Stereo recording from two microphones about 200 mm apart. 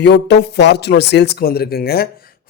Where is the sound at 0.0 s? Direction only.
60° left (ahead or behind).